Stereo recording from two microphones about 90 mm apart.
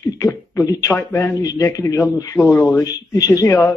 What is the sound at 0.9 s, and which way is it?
Speech, 25° left (ahead or behind).